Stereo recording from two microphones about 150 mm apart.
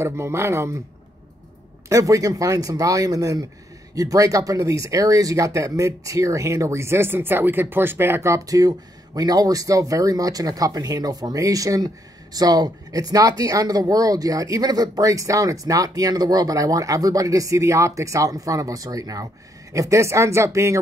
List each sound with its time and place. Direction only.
0.0 s speech: 20° right (ahead or behind)
1.9 s speech: 20° right (ahead or behind)